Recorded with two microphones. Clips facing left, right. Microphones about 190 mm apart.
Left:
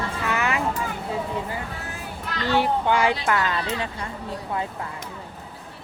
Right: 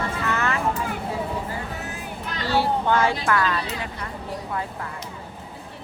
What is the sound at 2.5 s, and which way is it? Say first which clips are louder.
Speech: even; 15° left (ahead or behind).